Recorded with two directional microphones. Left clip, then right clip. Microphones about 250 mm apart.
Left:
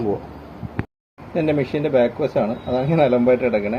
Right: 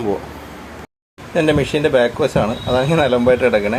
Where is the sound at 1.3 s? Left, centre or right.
Centre.